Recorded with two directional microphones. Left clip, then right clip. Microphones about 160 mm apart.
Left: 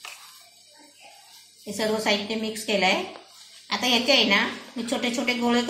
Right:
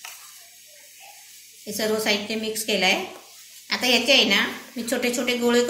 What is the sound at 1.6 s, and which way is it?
A woman's voice, 5° right (ahead or behind).